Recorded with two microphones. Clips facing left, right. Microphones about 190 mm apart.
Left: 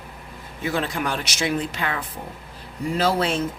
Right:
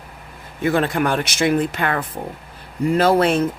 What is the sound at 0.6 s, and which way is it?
Speech, 55° right (ahead or behind).